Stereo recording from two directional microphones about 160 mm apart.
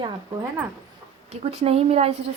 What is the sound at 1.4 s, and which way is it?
Speech, 40° right (ahead or behind).